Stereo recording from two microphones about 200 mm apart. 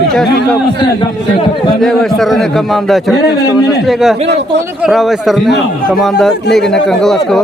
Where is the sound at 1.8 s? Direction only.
Centre (ahead or behind).